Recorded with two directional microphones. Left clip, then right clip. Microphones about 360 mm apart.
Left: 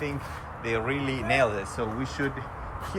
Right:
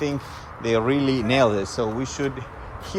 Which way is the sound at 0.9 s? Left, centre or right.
Right.